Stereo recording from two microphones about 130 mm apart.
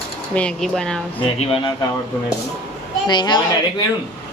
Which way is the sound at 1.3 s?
45° left (ahead or behind).